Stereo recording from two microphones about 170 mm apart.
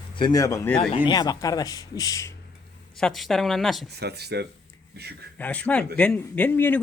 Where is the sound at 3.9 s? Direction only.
75° right (ahead or behind).